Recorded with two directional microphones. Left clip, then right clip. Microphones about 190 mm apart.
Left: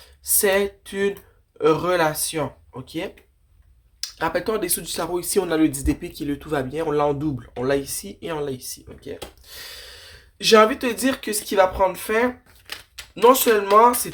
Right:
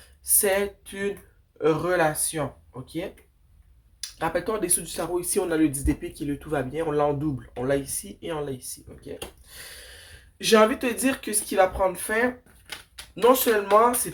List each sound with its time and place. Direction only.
0.2 s speech: 35° left (ahead or behind)
4.2 s speech: 40° left (ahead or behind)
12.7 s speech: 25° left (ahead or behind)
13.2 s speech: 40° left (ahead or behind)